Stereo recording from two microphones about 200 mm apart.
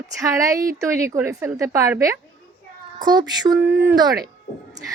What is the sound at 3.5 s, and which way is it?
Speech, 10° right (ahead or behind).